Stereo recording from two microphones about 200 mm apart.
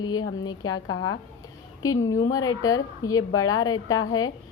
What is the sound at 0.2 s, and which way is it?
Speech, 90° left.